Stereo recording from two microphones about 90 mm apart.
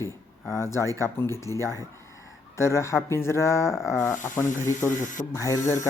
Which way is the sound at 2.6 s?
30° left (ahead or behind).